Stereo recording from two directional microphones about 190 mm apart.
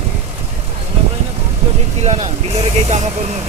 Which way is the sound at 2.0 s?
35° right (ahead or behind).